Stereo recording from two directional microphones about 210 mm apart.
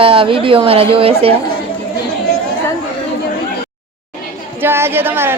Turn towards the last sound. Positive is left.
turn(degrees=-10)  # may be behind; listen again after turning